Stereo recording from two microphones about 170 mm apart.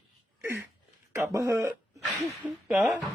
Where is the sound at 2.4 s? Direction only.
5° right (ahead or behind).